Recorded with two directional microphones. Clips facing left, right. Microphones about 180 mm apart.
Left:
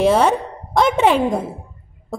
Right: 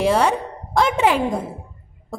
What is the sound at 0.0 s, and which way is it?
A woman's voice, 20° left (ahead or behind).